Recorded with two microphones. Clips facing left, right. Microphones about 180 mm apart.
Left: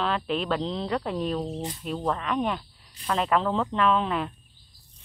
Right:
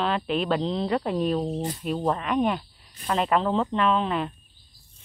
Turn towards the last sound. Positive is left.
turn(degrees=0)  # may be behind; listen again after turning